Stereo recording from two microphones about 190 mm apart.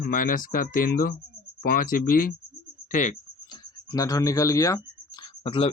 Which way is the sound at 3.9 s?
20° left (ahead or behind).